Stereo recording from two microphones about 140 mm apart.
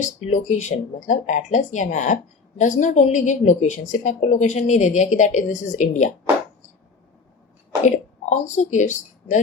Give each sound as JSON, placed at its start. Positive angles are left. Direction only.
{"t": 0.2, "sound": "a woman's voice", "side_deg": 55}
{"t": 8.3, "sound": "speech", "side_deg": 60}